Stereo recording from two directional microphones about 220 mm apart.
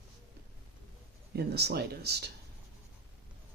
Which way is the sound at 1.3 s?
45° right (ahead or behind).